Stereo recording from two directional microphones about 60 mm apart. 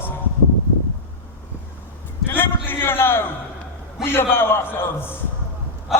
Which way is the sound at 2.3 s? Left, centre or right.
Left.